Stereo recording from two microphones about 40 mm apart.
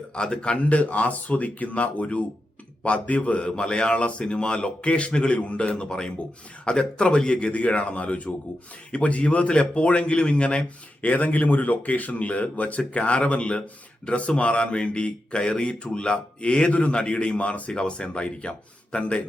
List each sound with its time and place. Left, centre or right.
0.1 s a man's voice: left
0.7 s a man's voice: left
11.0 s speech: left
17.7 s a man's voice: left